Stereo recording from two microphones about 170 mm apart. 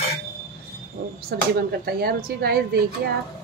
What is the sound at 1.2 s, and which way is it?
Speech, 65° right (ahead or behind).